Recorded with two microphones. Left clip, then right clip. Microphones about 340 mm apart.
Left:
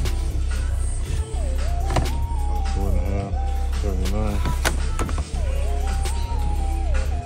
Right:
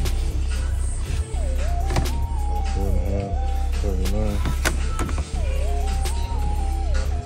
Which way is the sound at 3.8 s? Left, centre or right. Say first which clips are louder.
Even; centre.